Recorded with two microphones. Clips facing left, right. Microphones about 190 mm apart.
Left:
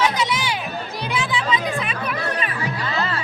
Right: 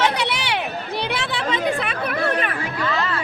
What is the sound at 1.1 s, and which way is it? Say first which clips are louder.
Music: left 1 dB; 65° right (ahead or behind).